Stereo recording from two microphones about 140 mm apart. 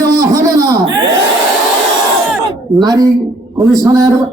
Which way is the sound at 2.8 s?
25° right (ahead or behind).